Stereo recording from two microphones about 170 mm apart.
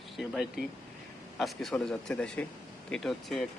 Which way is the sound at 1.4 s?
Centre (ahead or behind).